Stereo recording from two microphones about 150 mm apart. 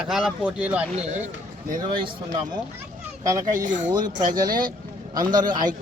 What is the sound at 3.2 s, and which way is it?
Speech, 20° right (ahead or behind).